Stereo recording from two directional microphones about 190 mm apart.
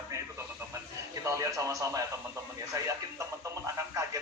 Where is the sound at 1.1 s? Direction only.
15° right (ahead or behind).